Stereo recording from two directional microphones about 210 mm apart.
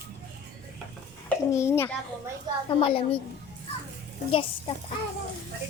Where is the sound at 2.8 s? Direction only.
25° left (ahead or behind).